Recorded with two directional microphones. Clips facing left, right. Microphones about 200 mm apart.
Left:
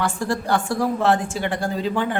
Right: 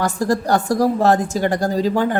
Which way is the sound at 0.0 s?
40° right (ahead or behind).